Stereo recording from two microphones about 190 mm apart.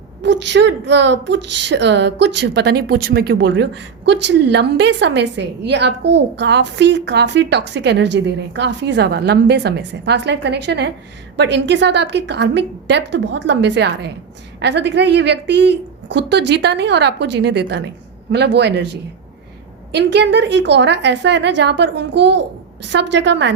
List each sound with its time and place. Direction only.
0.2 s a woman's voice: 65° right (ahead or behind)
19.9 s a woman's voice: 65° right (ahead or behind)